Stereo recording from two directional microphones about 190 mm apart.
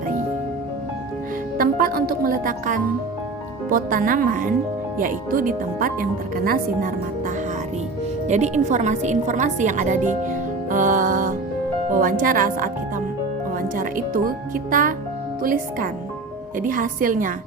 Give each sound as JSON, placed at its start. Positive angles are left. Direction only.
{"t": 1.5, "sound": "speech", "side_deg": -50}
{"t": 8.3, "sound": "a woman's voice", "side_deg": -40}
{"t": 13.7, "sound": "speech", "side_deg": -45}